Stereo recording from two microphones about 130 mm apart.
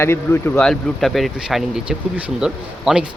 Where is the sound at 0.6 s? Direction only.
5° left (ahead or behind).